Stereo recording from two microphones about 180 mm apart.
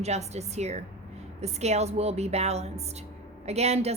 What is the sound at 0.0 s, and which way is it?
A woman's voice, 35° right (ahead or behind).